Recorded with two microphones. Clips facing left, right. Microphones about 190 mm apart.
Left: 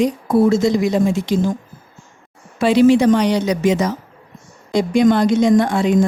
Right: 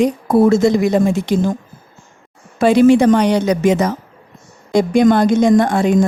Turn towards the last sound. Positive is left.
turn(degrees=-45)  # may be behind; listen again after turning